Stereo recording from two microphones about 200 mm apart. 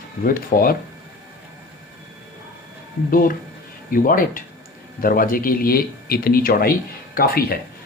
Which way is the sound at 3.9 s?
45° left (ahead or behind).